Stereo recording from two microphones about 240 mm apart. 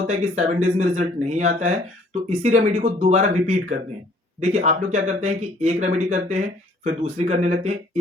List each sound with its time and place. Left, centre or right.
0.1 s speech: right